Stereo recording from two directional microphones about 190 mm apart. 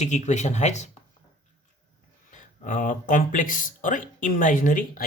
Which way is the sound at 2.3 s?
45° left (ahead or behind).